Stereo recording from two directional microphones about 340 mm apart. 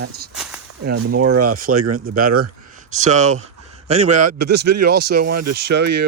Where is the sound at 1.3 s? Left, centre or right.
Right.